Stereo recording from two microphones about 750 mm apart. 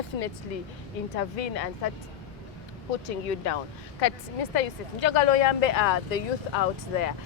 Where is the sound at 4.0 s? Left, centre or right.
Left.